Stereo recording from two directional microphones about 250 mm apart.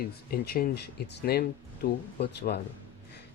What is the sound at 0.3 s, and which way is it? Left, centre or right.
Speech, left.